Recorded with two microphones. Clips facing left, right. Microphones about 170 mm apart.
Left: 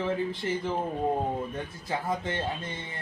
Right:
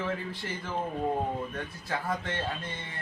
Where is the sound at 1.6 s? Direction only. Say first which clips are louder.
Left 2 dB; 15° left (ahead or behind).